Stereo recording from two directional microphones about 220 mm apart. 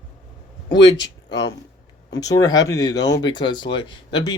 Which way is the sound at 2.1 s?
15° left (ahead or behind).